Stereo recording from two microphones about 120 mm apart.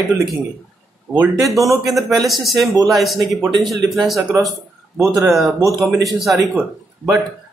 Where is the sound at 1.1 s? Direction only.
30° right (ahead or behind).